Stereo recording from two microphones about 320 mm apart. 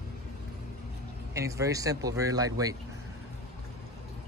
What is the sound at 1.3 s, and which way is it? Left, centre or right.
Speech, centre.